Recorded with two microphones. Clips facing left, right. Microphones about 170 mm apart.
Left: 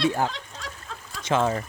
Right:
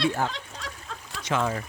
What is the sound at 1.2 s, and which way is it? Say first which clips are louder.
Speech: left 4 dB; 30° left (ahead or behind).